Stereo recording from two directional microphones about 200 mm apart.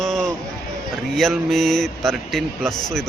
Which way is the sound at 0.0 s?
Centre (ahead or behind).